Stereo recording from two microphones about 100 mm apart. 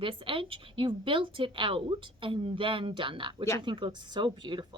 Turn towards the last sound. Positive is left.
turn(degrees=-50)  # may be behind; listen again after turning